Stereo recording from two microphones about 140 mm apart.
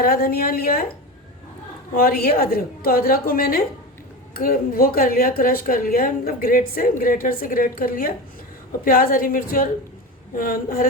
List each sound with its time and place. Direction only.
0.0 s a woman's voice: 90° left
2.0 s a woman's voice: 90° left